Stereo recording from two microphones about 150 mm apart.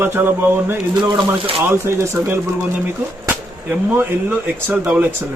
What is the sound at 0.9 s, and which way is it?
Speech, 30° right (ahead or behind).